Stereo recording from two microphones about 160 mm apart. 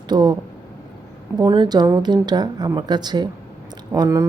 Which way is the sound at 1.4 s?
25° right (ahead or behind).